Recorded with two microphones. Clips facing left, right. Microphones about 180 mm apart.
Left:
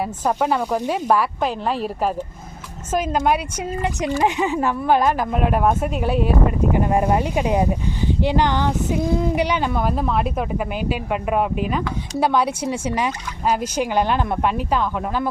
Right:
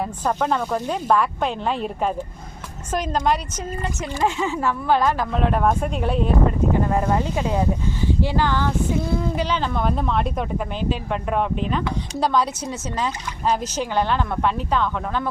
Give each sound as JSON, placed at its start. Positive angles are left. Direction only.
{"t": 0.0, "sound": "speech", "side_deg": 10}
{"t": 4.2, "sound": "speech", "side_deg": 15}